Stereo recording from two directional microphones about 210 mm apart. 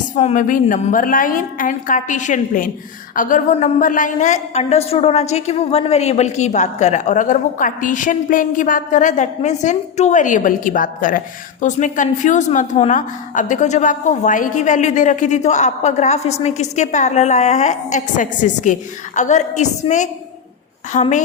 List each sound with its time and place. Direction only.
0.2 s a woman's voice: 35° left (ahead or behind)